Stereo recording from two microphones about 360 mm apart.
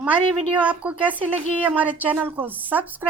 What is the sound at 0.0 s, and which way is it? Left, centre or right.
A woman's voice, centre.